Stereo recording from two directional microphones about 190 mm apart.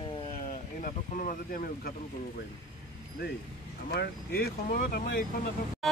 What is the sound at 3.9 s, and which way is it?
Speech, 55° left (ahead or behind).